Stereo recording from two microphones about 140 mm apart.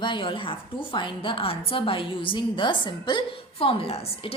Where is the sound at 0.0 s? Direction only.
35° left (ahead or behind).